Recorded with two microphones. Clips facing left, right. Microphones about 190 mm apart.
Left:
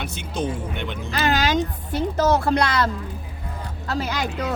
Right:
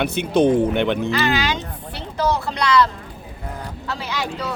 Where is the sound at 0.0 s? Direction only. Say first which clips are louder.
Right 10 dB; 65° right (ahead or behind).